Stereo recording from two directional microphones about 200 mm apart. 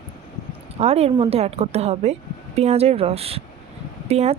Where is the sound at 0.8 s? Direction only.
30° right (ahead or behind).